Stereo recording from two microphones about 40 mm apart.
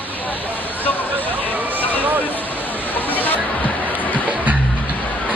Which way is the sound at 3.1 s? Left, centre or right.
Left.